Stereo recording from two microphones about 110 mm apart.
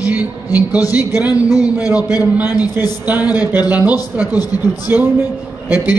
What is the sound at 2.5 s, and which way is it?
Speech, 35° left (ahead or behind).